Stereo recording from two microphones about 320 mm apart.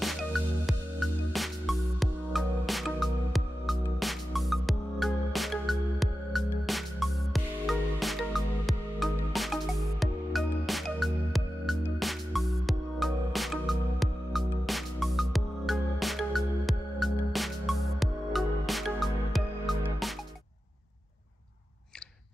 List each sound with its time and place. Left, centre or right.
0.0 s music: centre